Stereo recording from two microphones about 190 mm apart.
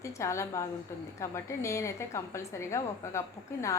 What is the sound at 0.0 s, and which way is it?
A woman's voice, 15° left (ahead or behind).